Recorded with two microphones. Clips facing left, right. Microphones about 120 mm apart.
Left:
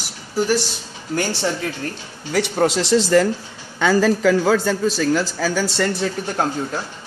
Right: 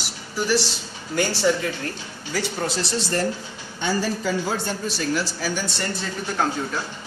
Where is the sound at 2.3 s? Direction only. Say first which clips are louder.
Left 8 dB; 75° left (ahead or behind); by 4.5 s 90° left.